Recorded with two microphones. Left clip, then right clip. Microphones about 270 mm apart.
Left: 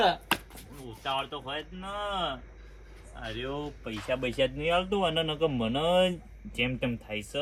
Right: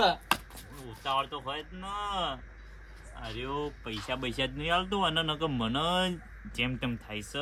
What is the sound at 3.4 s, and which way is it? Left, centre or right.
Speech, right.